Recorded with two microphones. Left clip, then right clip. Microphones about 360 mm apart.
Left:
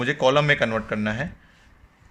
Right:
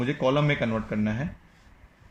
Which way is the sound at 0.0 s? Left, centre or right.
Left.